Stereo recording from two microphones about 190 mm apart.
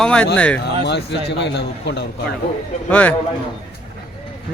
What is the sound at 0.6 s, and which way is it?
A man's voice, 65° left (ahead or behind).